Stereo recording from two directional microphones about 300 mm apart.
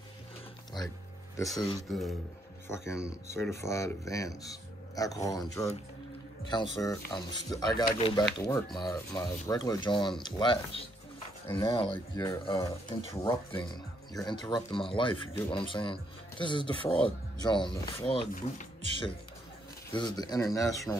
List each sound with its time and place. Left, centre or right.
0.8 s music: centre
1.3 s speech: centre
1.9 s speech: centre
11.4 s speech: centre